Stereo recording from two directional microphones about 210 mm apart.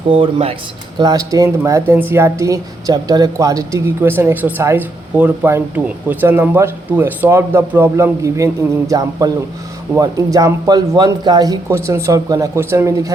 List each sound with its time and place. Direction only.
0.1 s speech: 25° right (ahead or behind)